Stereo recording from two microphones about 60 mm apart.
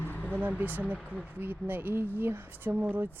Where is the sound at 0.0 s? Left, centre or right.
Left.